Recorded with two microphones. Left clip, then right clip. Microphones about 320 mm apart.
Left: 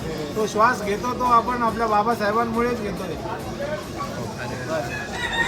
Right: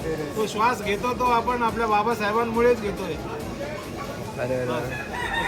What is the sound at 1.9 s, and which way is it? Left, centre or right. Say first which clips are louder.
Speech: left 2 dB; centre.